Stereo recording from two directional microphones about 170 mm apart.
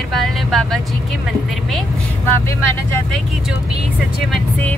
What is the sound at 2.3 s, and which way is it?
Speech, 15° left (ahead or behind).